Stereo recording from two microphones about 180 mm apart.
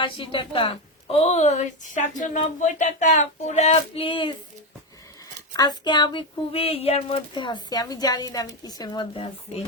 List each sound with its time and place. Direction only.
0.0 s a woman's voice: 30° left (ahead or behind)
5.5 s speech: 25° left (ahead or behind)